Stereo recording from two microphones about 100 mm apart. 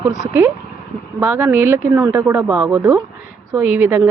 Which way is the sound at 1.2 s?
20° right (ahead or behind).